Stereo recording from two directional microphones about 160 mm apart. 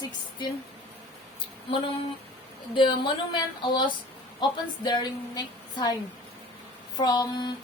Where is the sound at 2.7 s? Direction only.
30° left (ahead or behind).